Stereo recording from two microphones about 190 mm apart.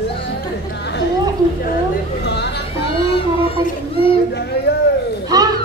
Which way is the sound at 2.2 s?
60° left (ahead or behind).